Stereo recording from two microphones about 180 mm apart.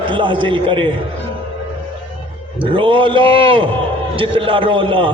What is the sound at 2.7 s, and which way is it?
A man's voice, 30° right (ahead or behind).